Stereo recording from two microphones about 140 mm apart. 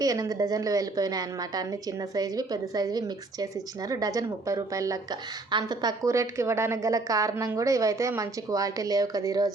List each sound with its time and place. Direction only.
0.0 s a woman's voice: 25° right (ahead or behind)
6.1 s a woman's voice: 20° right (ahead or behind)